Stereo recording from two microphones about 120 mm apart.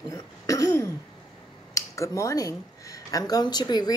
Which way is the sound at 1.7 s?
25° left (ahead or behind).